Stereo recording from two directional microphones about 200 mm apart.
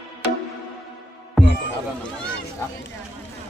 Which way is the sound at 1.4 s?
Centre (ahead or behind).